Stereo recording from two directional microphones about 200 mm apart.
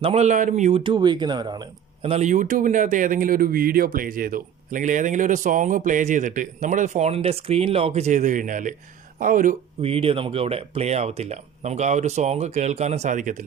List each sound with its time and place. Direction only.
0.0 s speech: 30° right (ahead or behind)
0.8 s speech: 25° right (ahead or behind); by 9.6 s 40° right (ahead or behind)
9.8 s speech: 30° right (ahead or behind)